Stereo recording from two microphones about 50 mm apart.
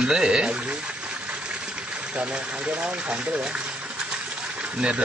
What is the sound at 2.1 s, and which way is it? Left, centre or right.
Speech, right.